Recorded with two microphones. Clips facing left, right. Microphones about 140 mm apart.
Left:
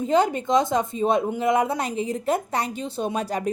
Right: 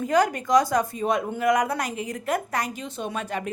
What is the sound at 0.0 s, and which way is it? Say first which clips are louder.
A woman's voice: left 1 dB; 25° left (ahead or behind).